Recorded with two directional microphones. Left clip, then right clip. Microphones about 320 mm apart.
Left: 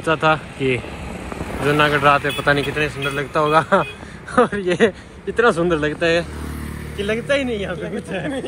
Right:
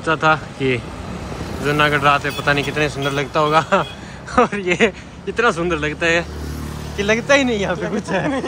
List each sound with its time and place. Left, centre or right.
0.0 s a man's voice: centre
0.6 s speech: centre
1.7 s a man's voice: centre